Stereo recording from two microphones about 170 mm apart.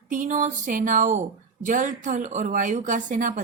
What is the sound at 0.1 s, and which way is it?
A woman's voice, 50° right (ahead or behind).